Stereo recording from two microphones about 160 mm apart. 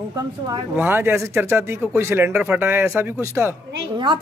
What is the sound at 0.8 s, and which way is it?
Speech, 15° right (ahead or behind).